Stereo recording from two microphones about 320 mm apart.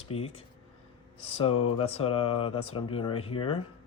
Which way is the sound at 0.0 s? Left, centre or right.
Centre.